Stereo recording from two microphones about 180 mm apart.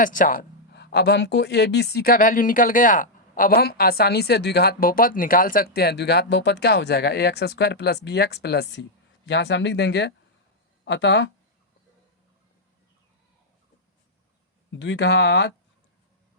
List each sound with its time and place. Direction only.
0.0 s speech: 50° left (ahead or behind); by 11.3 s 80° left
14.7 s speech: 85° left; by 15.5 s 70° left (ahead or behind)